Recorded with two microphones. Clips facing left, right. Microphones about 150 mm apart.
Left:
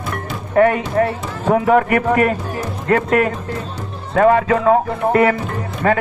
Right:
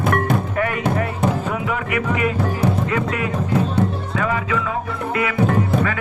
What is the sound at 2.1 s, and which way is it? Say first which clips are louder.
Speech: left 4 dB; 55° left (ahead or behind).